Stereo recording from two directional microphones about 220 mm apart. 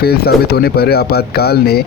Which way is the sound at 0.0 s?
45° left (ahead or behind).